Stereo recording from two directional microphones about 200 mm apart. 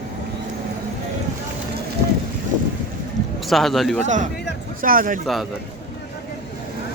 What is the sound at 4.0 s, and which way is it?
Speech, 35° right (ahead or behind).